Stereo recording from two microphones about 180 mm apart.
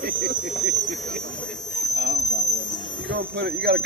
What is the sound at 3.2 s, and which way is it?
Speech, 65° right (ahead or behind).